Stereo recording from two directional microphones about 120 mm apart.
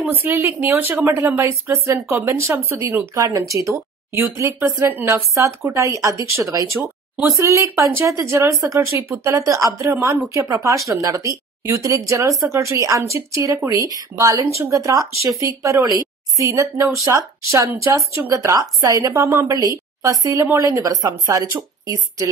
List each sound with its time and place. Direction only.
0.0 s a woman's voice: 15° right (ahead or behind); by 22.3 s 30° right (ahead or behind)